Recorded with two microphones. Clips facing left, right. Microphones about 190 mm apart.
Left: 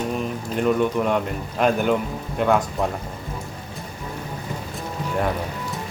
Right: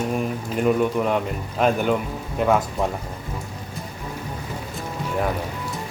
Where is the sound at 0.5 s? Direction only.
5° right (ahead or behind).